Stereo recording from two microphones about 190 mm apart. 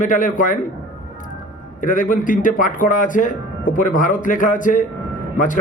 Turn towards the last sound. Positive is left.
turn(degrees=45)  # may be behind; listen again after turning